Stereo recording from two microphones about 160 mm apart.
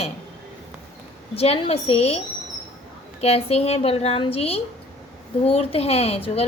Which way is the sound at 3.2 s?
40° left (ahead or behind).